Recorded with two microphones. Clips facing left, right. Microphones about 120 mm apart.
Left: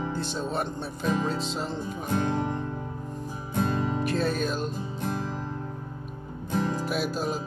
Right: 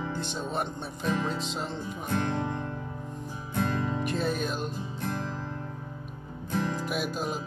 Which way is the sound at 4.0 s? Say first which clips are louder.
Left 3 dB; 15° right (ahead or behind).